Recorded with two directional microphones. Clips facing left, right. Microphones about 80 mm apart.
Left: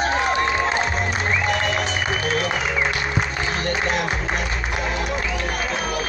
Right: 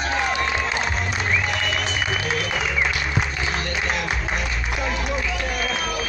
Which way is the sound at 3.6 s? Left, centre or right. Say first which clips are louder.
Left 3 dB; left.